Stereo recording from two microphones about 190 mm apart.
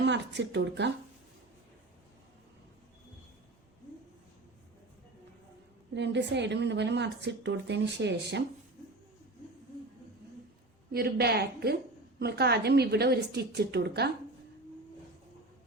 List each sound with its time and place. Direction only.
0.0 s speech: 65° right (ahead or behind)
5.9 s speech: 65° right (ahead or behind)
10.9 s speech: 55° right (ahead or behind)